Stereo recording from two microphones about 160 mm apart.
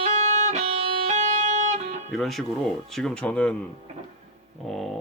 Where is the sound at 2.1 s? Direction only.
Centre (ahead or behind).